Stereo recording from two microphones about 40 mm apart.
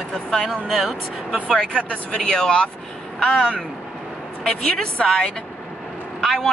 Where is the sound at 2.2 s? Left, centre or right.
Centre.